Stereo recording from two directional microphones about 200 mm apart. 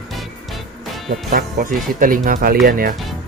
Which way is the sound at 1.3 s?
45° right (ahead or behind).